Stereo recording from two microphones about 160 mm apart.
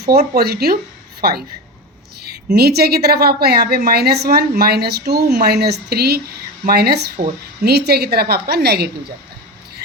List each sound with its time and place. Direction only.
0.3 s speech: 75° right (ahead or behind)
2.2 s a woman's voice: 85° right